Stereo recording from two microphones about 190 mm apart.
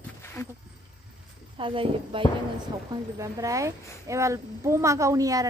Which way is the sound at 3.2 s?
15° right (ahead or behind).